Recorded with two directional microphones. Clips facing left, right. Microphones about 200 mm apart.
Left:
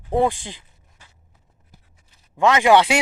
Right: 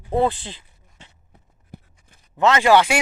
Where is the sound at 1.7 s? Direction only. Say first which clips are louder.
Right 13 dB; 60° right (ahead or behind).